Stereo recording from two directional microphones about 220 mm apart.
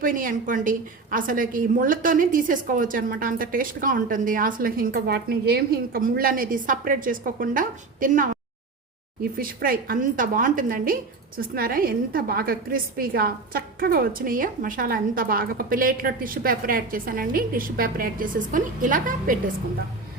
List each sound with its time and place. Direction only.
0.0 s a woman's voice: 40° right (ahead or behind)
9.4 s a woman's voice: 40° right (ahead or behind)